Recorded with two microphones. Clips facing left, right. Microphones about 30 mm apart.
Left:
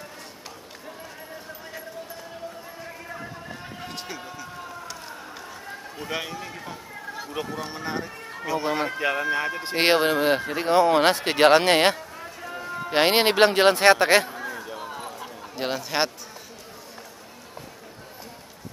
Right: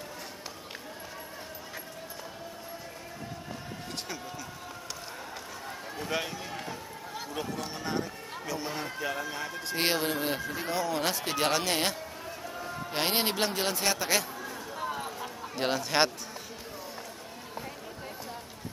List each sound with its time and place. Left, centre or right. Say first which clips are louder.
5.9 s speech: left 2 dB; centre
8.5 s speech: left 11 dB; left
12.4 s run: left 7 dB; left
12.9 s speech: left 10 dB; left
14.3 s a sound: left 5 dB; left
14.8 s a sound: even; centre